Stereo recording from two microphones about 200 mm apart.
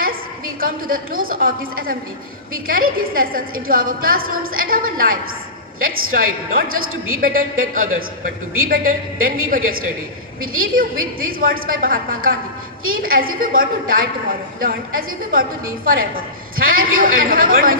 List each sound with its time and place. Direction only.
0.0 s a woman's voice: 45° right (ahead or behind)